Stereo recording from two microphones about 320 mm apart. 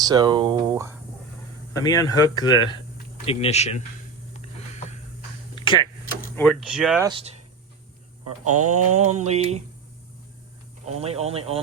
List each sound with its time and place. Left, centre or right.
0.0 s speech: centre
1.7 s speech: centre
5.5 s a sound: centre
6.3 s speech: centre
7.1 s speech: centre
8.2 s mantra: right
9.0 s speech: right
10.8 s speech: centre